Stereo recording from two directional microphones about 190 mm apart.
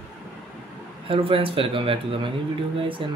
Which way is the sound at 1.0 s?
30° right (ahead or behind).